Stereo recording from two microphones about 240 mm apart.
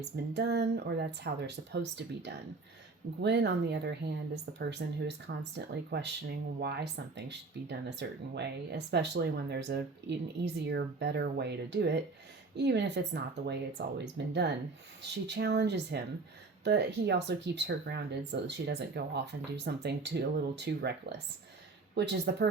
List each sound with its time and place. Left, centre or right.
0.3 s speech: right